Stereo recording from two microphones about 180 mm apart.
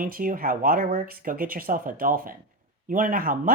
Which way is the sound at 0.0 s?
50° right (ahead or behind).